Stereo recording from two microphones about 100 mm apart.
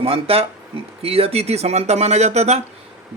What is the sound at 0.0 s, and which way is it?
Speech, 75° right (ahead or behind).